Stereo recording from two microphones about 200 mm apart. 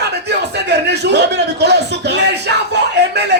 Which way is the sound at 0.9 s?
55° right (ahead or behind).